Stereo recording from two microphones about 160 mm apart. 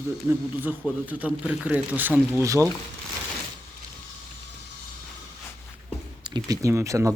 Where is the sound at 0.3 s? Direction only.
10° right (ahead or behind).